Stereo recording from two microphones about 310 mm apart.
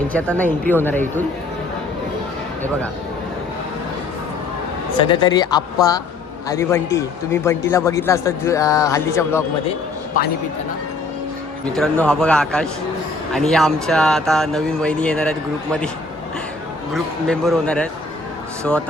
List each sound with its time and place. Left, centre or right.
0.6 s speech: centre
4.9 s speech: centre
10.2 s a man's voice: left
11.7 s a man's voice: centre
16.9 s a man's voice: centre